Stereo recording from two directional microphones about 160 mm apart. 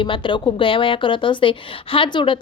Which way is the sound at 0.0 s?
30° left (ahead or behind).